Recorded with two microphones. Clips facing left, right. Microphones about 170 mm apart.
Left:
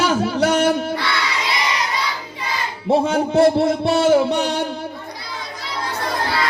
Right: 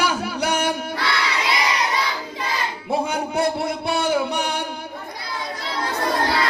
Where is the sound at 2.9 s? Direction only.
25° left (ahead or behind).